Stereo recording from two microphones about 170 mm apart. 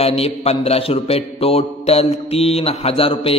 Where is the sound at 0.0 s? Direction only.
35° left (ahead or behind).